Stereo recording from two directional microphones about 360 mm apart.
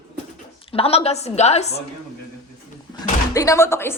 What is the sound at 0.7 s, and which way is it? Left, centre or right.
A woman's voice, centre.